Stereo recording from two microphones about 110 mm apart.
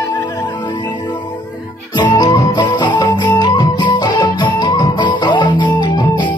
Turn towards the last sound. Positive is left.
turn(degrees=45)  # may be behind; listen again after turning